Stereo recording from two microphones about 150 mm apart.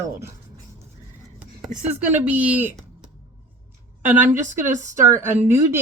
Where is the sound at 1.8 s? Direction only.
10° right (ahead or behind).